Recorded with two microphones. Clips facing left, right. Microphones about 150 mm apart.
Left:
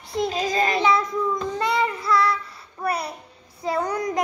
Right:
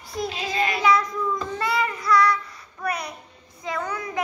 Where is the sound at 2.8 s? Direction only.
30° left (ahead or behind).